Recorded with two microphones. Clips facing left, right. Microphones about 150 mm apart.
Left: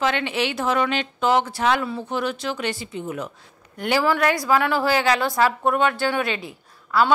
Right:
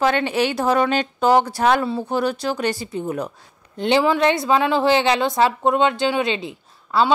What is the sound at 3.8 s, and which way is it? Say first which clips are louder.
A woman's voice: right 3 dB; 20° right (ahead or behind).